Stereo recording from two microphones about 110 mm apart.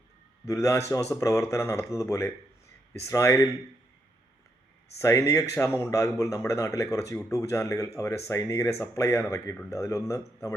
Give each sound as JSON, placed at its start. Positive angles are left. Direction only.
{"t": 0.4, "sound": "speech", "side_deg": 25}
{"t": 4.9, "sound": "speech", "side_deg": 25}